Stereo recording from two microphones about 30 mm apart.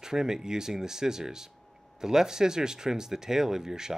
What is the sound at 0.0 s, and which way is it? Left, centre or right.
Speech, centre.